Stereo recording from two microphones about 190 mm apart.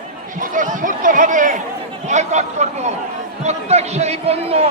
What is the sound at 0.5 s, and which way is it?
Speech, 45° right (ahead or behind).